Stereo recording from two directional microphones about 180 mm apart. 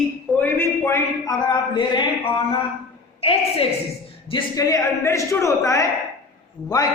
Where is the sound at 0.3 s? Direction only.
10° left (ahead or behind); by 2.0 s 25° left (ahead or behind).